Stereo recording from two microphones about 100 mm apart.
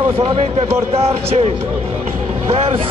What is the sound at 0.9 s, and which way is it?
Speech, 90° right.